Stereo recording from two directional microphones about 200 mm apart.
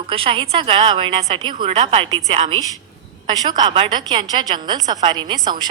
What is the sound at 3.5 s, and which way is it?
A woman's voice, 20° right (ahead or behind).